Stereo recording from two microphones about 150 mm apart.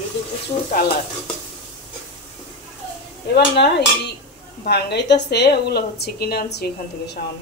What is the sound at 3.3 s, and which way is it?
Speech, 90° left.